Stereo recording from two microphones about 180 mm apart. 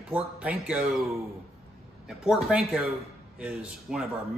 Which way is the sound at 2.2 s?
5° right (ahead or behind).